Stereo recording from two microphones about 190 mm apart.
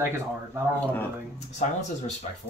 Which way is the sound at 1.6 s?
40° left (ahead or behind).